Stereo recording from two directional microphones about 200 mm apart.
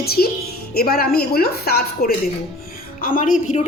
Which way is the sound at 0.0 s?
50° left (ahead or behind).